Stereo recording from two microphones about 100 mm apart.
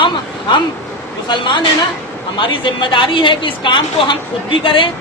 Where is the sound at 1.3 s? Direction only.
50° left (ahead or behind).